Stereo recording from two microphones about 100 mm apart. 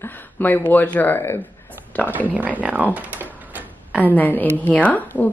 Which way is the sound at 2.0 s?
15° left (ahead or behind).